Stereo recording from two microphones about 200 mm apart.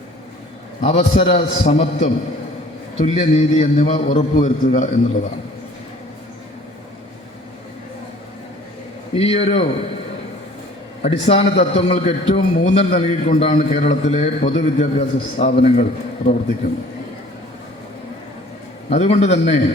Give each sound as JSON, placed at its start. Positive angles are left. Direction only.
{"t": 0.8, "sound": "a man's voice", "side_deg": 30}
{"t": 9.1, "sound": "a man's voice", "side_deg": 30}
{"t": 11.0, "sound": "a man's voice", "side_deg": 30}
{"t": 18.9, "sound": "a man's voice", "side_deg": 30}